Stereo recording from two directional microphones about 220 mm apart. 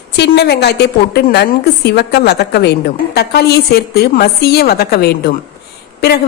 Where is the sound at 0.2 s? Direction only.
50° left (ahead or behind).